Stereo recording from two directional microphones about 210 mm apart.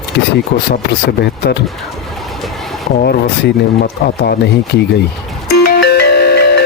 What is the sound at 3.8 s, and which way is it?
Speech, 45° left (ahead or behind).